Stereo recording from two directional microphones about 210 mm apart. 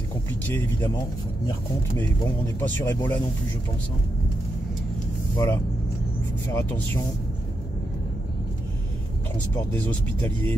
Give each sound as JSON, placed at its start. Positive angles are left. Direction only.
{"t": 0.5, "sound": "speech", "side_deg": 10}
{"t": 2.6, "sound": "speech", "side_deg": 10}
{"t": 5.3, "sound": "speech", "side_deg": 15}
{"t": 9.8, "sound": "speech", "side_deg": 5}